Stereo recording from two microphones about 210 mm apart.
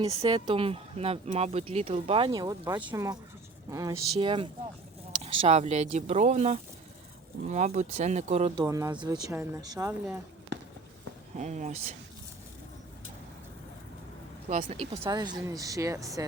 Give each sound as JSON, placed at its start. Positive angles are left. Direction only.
{"t": 0.2, "sound": "speech", "side_deg": -20}
{"t": 8.5, "sound": "speech", "side_deg": -15}
{"t": 11.3, "sound": "speech", "side_deg": -35}
{"t": 14.5, "sound": "a woman's voice", "side_deg": -30}